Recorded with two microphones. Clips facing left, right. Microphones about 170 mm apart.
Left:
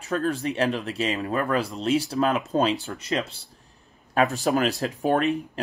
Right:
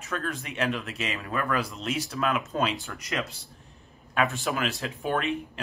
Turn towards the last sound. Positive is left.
turn(degrees=40)  # may be behind; listen again after turning